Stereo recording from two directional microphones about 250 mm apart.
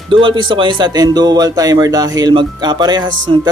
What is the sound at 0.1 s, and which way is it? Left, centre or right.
Speech, centre.